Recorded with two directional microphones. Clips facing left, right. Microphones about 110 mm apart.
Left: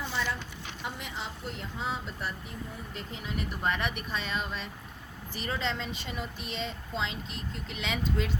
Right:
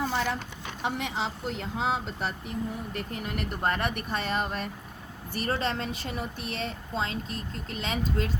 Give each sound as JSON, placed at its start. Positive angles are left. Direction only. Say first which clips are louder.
{"t": 0.0, "sound": "a sound", "louder": "right 5 dB", "side_deg": -55}
{"t": 0.8, "sound": "speech", "louder": "right 8 dB", "side_deg": -70}
{"t": 1.7, "sound": "speech", "louder": "right 6 dB", "side_deg": -70}
{"t": 2.9, "sound": "speech", "louder": "right 4 dB", "side_deg": -55}